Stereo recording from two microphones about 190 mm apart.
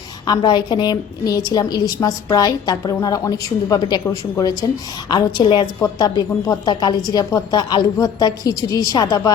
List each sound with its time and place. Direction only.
0.3 s a woman's voice: 20° left (ahead or behind)